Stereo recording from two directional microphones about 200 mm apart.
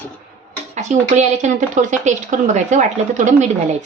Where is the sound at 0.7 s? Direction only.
35° right (ahead or behind).